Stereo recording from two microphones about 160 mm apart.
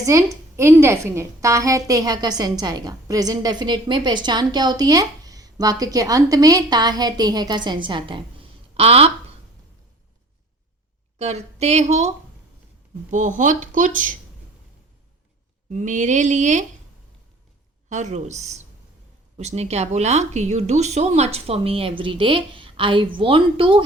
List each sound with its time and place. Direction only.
0.0 s a woman's voice: 20° right (ahead or behind); by 9.1 s 40° right (ahead or behind)
11.2 s a woman's voice: 40° right (ahead or behind)
15.7 s a woman's voice: 50° right (ahead or behind)
17.8 s a woman's voice: 50° right (ahead or behind); by 23.8 s 30° right (ahead or behind)